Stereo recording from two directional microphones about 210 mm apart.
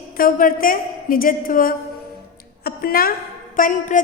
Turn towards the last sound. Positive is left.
turn(degrees=40)  # may be behind; listen again after turning